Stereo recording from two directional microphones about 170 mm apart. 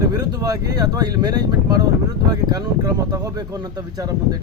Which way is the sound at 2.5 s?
20° right (ahead or behind).